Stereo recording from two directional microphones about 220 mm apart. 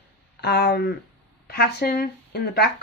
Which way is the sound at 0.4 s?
50° left (ahead or behind).